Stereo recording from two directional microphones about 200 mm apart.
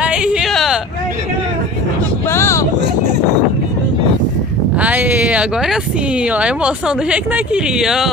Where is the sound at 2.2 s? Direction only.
15° left (ahead or behind).